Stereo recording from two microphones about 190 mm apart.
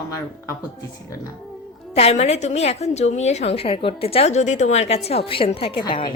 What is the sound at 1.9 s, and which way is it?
A woman's voice, 35° left (ahead or behind).